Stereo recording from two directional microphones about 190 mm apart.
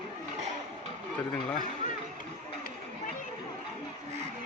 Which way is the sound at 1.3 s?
5° left (ahead or behind).